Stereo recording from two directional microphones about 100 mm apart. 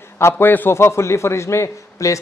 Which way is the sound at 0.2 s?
25° left (ahead or behind).